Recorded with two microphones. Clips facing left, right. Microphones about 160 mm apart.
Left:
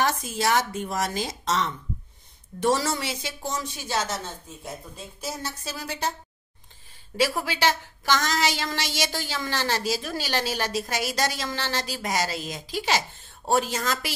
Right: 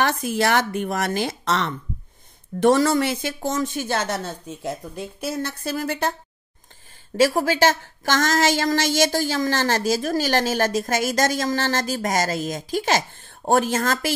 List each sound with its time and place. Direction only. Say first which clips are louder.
0.0 s speech: right 4 dB; 65° right (ahead or behind)
7.2 s a woman's voice: right 7 dB; 45° right (ahead or behind)